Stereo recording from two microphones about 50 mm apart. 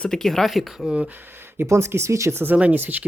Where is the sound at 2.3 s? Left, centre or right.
Right.